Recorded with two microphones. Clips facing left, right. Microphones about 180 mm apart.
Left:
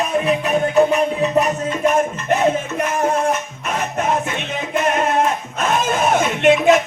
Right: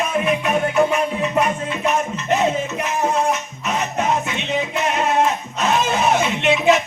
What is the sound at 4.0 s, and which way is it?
Music, 50° left (ahead or behind).